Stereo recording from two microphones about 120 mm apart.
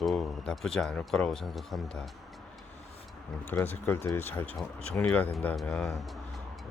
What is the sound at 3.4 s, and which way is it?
Speech, 15° left (ahead or behind).